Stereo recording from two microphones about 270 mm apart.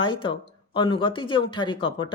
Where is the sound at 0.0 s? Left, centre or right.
Centre.